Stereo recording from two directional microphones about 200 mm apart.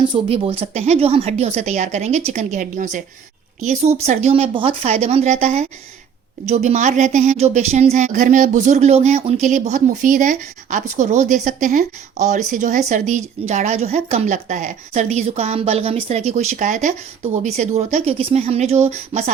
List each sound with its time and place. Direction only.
0.1 s a woman's voice: 30° right (ahead or behind)